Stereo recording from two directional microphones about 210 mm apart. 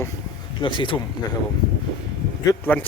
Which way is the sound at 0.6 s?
25° left (ahead or behind).